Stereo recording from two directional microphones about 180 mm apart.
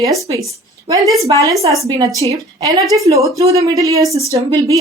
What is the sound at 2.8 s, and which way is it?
Speech, centre (ahead or behind).